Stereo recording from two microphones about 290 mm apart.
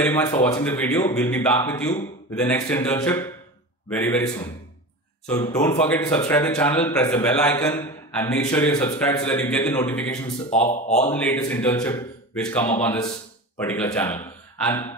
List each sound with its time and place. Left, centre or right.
0.0 s speech: centre
10.5 s speech: left
11.1 s speech: centre